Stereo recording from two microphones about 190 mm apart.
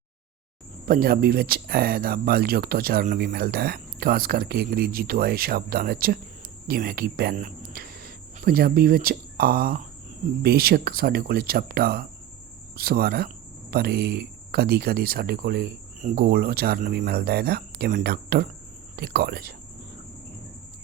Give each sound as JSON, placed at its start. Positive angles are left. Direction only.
{"t": 0.9, "sound": "speech", "side_deg": -50}